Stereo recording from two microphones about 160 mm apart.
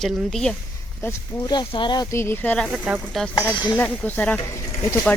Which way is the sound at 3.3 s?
15° left (ahead or behind).